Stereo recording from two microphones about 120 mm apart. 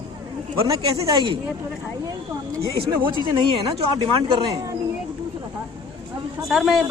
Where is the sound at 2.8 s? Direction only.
40° right (ahead or behind).